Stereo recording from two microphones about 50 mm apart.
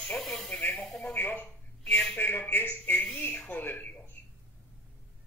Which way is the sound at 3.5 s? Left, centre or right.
Left.